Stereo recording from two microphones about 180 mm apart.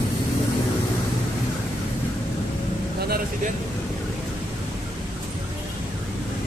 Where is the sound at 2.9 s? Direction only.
60° right (ahead or behind).